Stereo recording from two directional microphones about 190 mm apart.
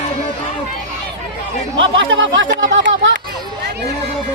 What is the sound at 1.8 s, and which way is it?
Speech, 85° right.